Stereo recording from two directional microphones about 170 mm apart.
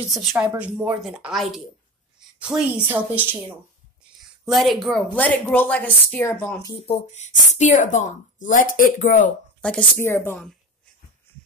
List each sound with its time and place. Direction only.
0.1 s a woman's voice: centre (ahead or behind)
4.5 s speech: centre (ahead or behind); by 6.8 s 20° left (ahead or behind)
6.9 s a woman's voice: 40° left (ahead or behind)
9.6 s speech: 10° left (ahead or behind)